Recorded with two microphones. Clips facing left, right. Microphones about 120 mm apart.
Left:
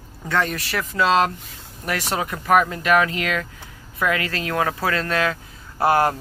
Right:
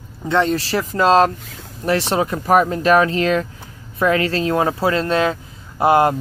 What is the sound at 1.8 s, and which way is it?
Speech, 30° right (ahead or behind).